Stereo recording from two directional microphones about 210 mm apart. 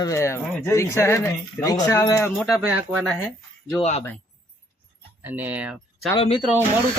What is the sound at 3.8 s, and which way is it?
Speech, 30° left (ahead or behind).